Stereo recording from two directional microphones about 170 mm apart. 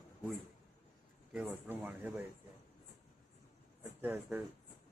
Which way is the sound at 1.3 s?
10° right (ahead or behind).